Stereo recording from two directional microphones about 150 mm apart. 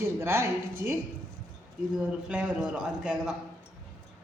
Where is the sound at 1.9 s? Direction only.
10° right (ahead or behind).